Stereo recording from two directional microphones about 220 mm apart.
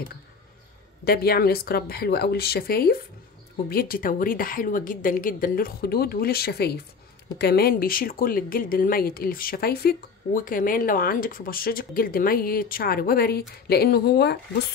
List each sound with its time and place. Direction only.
1.0 s speech: 45° left (ahead or behind)